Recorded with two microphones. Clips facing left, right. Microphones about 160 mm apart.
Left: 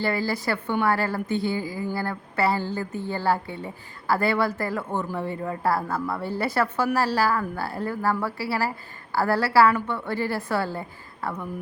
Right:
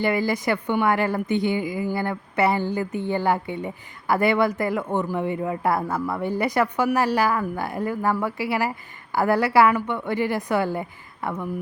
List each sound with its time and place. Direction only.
0.0 s a woman's voice: 15° right (ahead or behind)